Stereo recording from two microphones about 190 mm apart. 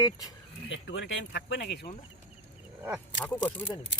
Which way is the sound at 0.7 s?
75° left (ahead or behind).